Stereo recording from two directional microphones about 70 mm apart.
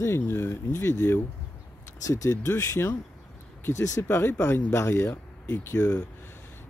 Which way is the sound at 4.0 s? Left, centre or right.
Left.